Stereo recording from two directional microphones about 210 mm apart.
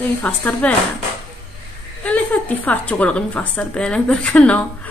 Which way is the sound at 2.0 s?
5° left (ahead or behind).